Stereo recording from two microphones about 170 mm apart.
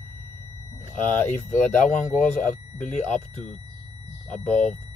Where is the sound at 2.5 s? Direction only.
50° left (ahead or behind).